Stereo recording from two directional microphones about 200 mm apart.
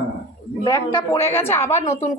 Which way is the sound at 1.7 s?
35° left (ahead or behind).